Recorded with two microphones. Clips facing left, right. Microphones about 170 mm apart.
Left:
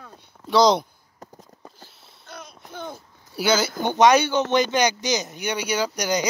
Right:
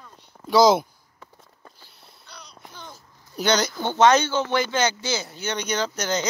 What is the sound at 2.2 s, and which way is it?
Babbling, 50° left (ahead or behind).